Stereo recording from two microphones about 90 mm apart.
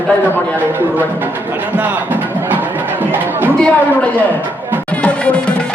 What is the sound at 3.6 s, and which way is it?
Speech, 15° left (ahead or behind).